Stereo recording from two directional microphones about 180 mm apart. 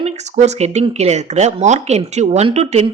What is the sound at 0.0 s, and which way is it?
A woman's voice, 40° right (ahead or behind).